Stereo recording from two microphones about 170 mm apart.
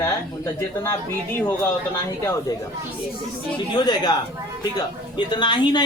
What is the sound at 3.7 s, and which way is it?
Speech, 25° left (ahead or behind).